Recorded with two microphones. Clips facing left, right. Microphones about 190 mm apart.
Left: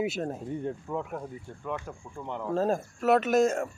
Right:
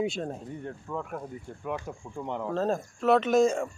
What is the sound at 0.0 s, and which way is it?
Speech, 5° left (ahead or behind).